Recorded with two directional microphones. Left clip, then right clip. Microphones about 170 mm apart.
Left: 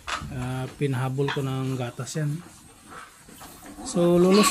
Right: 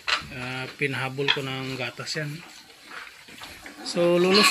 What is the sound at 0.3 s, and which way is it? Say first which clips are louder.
Speech: right 2 dB; 20° left (ahead or behind).